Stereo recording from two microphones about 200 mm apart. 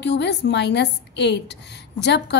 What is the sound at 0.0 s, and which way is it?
A woman's voice, 60° left (ahead or behind).